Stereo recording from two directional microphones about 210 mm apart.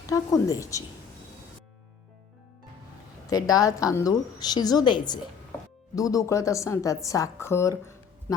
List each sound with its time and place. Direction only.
0.1 s a woman's voice: 15° left (ahead or behind)
3.2 s a woman's voice: 15° left (ahead or behind)